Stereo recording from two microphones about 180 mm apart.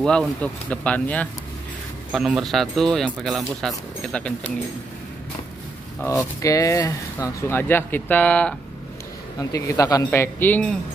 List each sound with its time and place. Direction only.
0.0 s speech: 5° left (ahead or behind)
6.4 s speech: 20° left (ahead or behind)
9.4 s speech: 20° left (ahead or behind)